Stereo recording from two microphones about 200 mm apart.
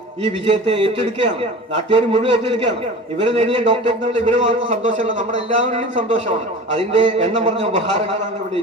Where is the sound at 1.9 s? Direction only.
25° right (ahead or behind).